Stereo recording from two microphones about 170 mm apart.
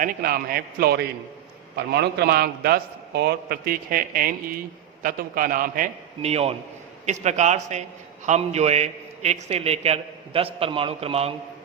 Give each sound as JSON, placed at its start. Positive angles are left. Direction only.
{"t": 0.0, "sound": "a man's voice", "side_deg": -55}
{"t": 6.2, "sound": "a man's voice", "side_deg": -35}